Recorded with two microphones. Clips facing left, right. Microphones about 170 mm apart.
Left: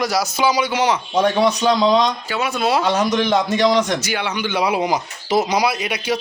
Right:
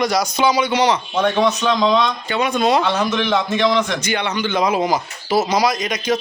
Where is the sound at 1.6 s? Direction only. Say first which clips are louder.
Left 1 dB; 35° left (ahead or behind).